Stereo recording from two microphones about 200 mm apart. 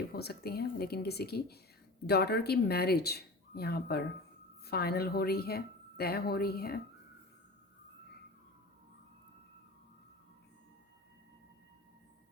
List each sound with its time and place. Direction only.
0.1 s a woman's voice: 50° left (ahead or behind)